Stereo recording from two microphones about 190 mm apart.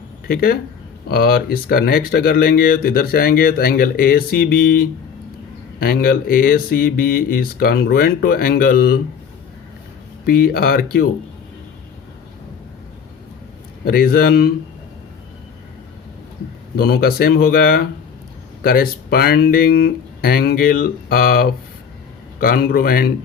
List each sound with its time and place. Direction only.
0.3 s speech: 50° left (ahead or behind)
10.2 s speech: 50° left (ahead or behind)
13.8 s speech: 50° left (ahead or behind)
16.7 s speech: 55° left (ahead or behind)